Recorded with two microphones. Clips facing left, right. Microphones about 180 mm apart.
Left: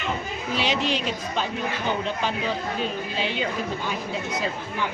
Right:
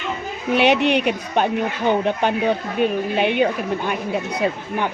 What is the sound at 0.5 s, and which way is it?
Speech, 60° right (ahead or behind).